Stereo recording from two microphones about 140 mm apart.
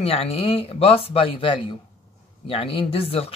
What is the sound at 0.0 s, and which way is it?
Speech, 45° left (ahead or behind).